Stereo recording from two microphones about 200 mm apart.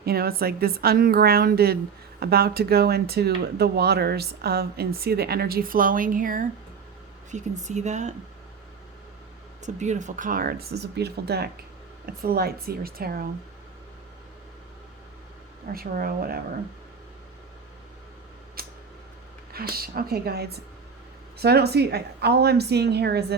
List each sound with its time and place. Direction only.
0.0 s speech: 50° right (ahead or behind)
9.6 s speech: 35° right (ahead or behind)
15.7 s speech: 45° right (ahead or behind)
18.6 s a sound: 50° right (ahead or behind)
19.5 s a woman's voice: 50° right (ahead or behind)